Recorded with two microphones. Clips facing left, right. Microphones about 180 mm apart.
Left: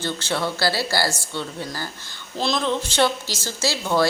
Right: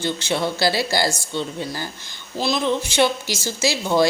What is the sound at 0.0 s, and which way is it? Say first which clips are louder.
Speech: right 2 dB; 15° right (ahead or behind).